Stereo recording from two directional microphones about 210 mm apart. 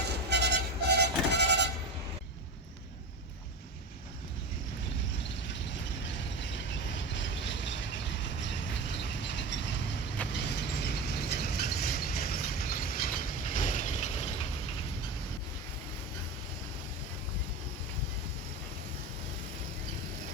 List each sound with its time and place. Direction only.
0.1 s music: 55° right (ahead or behind)
6.9 s vehicle: 60° left (ahead or behind)
8.9 s vehicle: 55° left (ahead or behind)
10.3 s a sound: 55° left (ahead or behind); by 14.4 s 30° left (ahead or behind)